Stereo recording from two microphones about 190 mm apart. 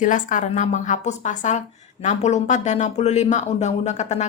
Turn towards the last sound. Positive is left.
turn(degrees=35)  # may be behind; listen again after turning